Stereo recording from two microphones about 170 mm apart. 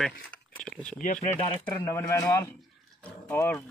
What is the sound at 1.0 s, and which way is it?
Speech, 40° left (ahead or behind).